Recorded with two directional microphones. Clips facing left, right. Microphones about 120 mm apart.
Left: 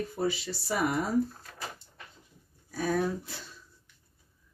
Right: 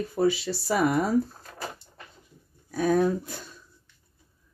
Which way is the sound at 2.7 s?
55° right (ahead or behind).